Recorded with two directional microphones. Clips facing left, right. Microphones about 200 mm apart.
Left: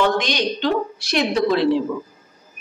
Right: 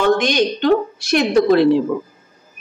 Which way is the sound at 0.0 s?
50° right (ahead or behind).